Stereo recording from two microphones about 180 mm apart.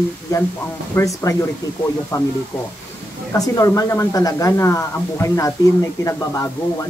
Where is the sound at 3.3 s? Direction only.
20° left (ahead or behind).